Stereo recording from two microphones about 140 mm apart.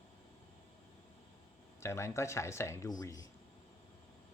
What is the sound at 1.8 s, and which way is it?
Speech, 20° left (ahead or behind).